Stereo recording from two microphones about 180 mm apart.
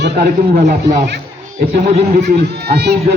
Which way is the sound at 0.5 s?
45° right (ahead or behind).